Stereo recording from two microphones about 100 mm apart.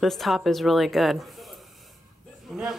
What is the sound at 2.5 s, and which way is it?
Speech, 5° right (ahead or behind).